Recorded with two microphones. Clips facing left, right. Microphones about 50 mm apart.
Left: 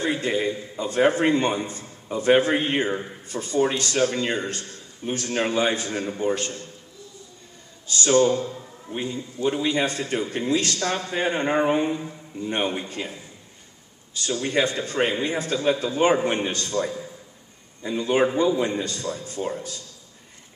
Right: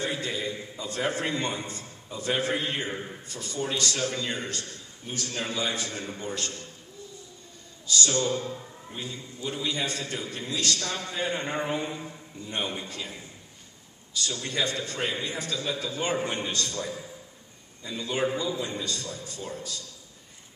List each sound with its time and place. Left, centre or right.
0.0 s a man's voice: left
7.8 s a man's voice: left